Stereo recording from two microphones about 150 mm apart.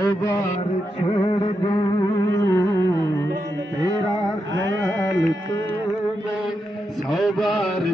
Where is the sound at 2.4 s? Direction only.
20° left (ahead or behind).